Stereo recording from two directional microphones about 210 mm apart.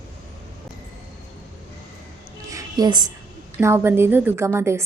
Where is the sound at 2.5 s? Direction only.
15° right (ahead or behind).